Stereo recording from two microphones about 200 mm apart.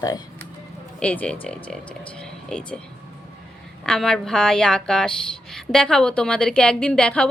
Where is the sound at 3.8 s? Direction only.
5° left (ahead or behind).